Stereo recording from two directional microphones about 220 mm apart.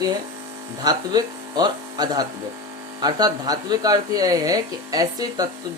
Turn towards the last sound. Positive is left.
turn(degrees=-15)  # may be behind; listen again after turning